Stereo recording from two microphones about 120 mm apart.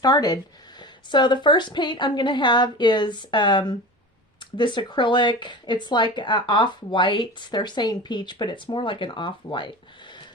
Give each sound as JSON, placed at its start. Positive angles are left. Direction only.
{"t": 0.0, "sound": "speech", "side_deg": 35}